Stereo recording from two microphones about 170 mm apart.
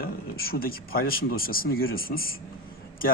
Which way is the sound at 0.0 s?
60° left (ahead or behind).